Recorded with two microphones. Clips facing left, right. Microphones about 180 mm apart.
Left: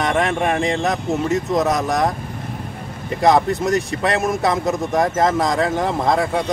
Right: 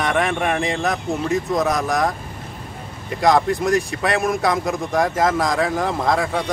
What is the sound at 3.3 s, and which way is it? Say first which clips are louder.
Speech: left 1 dB; 5° left (ahead or behind).